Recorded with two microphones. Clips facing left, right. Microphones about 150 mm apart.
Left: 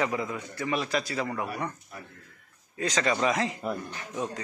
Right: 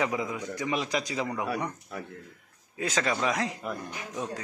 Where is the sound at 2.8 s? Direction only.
5° right (ahead or behind).